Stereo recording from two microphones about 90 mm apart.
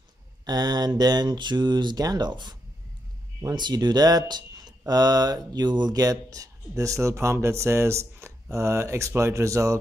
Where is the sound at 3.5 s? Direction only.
55° right (ahead or behind).